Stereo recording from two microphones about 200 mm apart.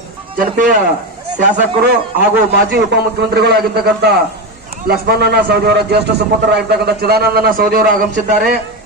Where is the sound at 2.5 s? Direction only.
55° right (ahead or behind).